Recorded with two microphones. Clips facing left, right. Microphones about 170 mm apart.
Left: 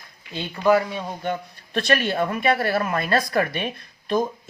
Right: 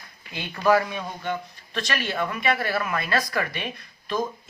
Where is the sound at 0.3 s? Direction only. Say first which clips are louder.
Left 2 dB; 20° left (ahead or behind).